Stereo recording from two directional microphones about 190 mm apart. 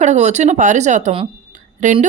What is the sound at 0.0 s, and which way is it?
A woman's voice, 35° right (ahead or behind).